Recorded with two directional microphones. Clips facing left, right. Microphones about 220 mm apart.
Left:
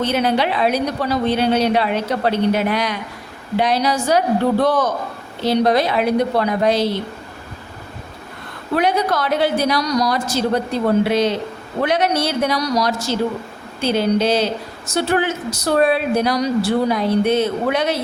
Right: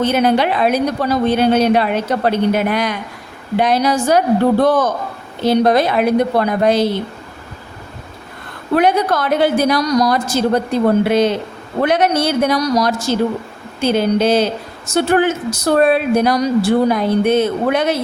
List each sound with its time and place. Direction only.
0.0 s a woman's voice: 50° right (ahead or behind)
8.7 s a woman's voice: 50° right (ahead or behind)